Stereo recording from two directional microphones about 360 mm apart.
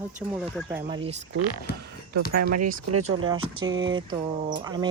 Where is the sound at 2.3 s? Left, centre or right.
Right.